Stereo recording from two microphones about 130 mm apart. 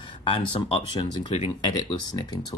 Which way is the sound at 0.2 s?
45° left (ahead or behind).